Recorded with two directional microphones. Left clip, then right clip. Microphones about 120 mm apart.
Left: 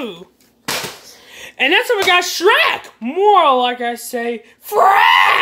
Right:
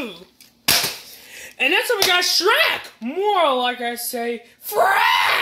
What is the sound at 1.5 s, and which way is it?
Speech, 30° left (ahead or behind).